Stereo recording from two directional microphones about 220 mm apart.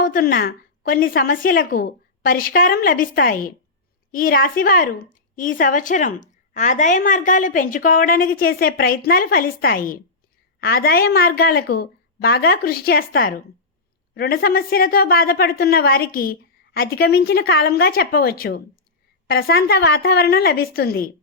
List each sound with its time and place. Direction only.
0.0 s a woman's voice: 40° left (ahead or behind)